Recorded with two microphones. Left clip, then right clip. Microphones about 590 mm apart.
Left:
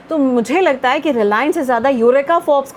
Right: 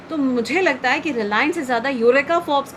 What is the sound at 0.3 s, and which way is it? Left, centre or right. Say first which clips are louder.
A woman's voice: left 3 dB; left.